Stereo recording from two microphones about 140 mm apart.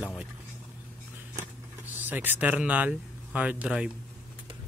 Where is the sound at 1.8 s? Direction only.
10° right (ahead or behind).